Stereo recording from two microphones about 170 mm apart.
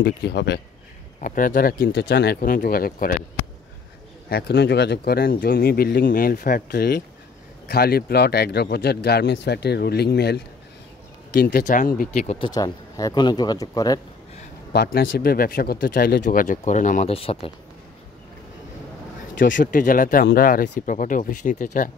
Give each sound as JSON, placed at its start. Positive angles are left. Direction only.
{"t": 0.0, "sound": "speech", "side_deg": 75}
{"t": 1.2, "sound": "speech", "side_deg": 55}
{"t": 4.3, "sound": "speech", "side_deg": 70}
{"t": 11.5, "sound": "speech", "side_deg": 50}
{"t": 12.2, "sound": "speech", "side_deg": 40}
{"t": 12.4, "sound": "speech", "side_deg": 25}
{"t": 14.7, "sound": "speech", "side_deg": 65}
{"t": 16.3, "sound": "speech", "side_deg": 50}
{"t": 17.1, "sound": "speech", "side_deg": 35}
{"t": 19.3, "sound": "speech", "side_deg": 50}